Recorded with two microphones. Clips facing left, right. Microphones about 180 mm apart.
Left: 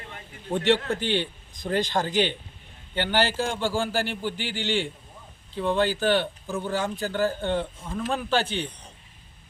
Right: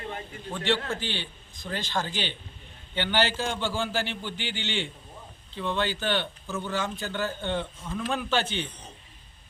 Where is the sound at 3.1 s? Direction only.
10° left (ahead or behind).